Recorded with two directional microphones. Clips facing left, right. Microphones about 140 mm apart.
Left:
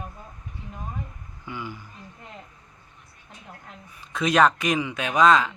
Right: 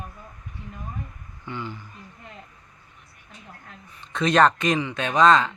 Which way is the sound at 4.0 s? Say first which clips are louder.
Right 1 dB; 5° left (ahead or behind).